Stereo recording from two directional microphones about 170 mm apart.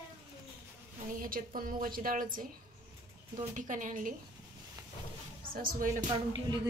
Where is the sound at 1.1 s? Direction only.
55° right (ahead or behind).